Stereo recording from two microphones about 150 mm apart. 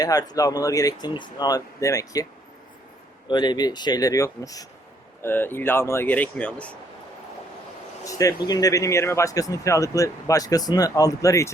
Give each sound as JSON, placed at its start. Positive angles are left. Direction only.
{"t": 0.0, "sound": "speech", "side_deg": 25}
{"t": 3.2, "sound": "speech", "side_deg": 30}
{"t": 8.0, "sound": "speech", "side_deg": 25}